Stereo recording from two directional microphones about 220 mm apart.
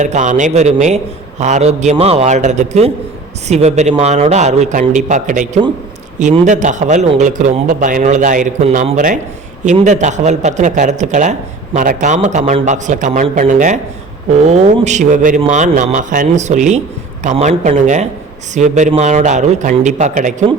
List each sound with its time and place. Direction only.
0.0 s speech: 35° right (ahead or behind)